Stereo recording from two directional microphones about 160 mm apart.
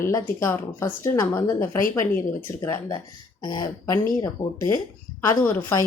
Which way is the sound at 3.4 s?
25° left (ahead or behind).